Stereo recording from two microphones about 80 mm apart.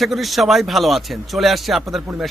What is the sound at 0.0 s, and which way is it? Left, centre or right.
A man's voice, centre.